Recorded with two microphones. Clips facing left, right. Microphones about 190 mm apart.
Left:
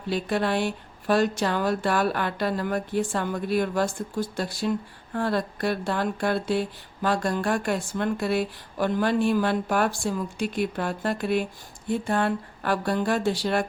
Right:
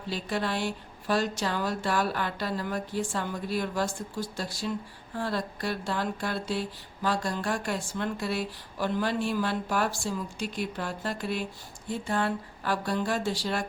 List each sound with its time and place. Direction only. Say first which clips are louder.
0.1 s speech: left 6 dB; 60° left (ahead or behind)